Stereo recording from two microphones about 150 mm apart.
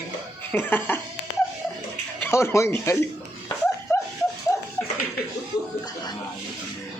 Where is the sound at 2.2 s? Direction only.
20° left (ahead or behind).